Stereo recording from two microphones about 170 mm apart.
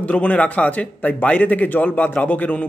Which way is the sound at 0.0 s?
10° left (ahead or behind).